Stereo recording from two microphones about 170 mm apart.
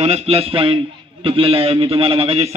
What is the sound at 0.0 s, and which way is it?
A man's voice, 40° right (ahead or behind).